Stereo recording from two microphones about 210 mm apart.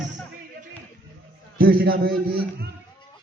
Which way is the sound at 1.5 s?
45° right (ahead or behind).